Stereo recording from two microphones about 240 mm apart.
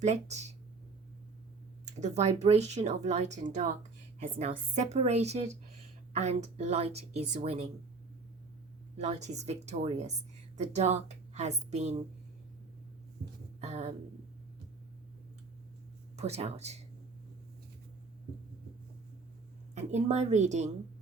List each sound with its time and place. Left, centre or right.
0.0 s speech: right
1.8 s speech: right
9.0 s a woman's voice: right
13.6 s speech: right
16.1 s speech: right
19.7 s speech: right